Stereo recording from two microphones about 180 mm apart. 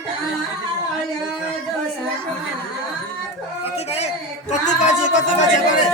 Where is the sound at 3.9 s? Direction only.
35° left (ahead or behind).